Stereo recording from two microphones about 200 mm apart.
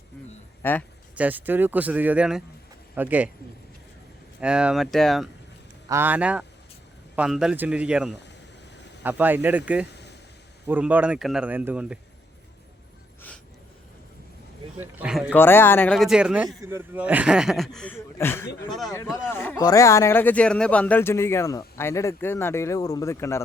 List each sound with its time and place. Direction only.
0.6 s speech: 10° left (ahead or behind)
1.1 s a man's voice: 10° right (ahead or behind)
4.4 s speech: 5° right (ahead or behind)
5.9 s speech: 10° right (ahead or behind)
9.9 s a sound: 55° left (ahead or behind)
10.7 s speech: 10° right (ahead or behind)
14.8 s speech: 5° right (ahead or behind)
15.3 s speech: 10° left (ahead or behind)
18.7 s speech: centre (ahead or behind)
18.9 s speech: 15° left (ahead or behind)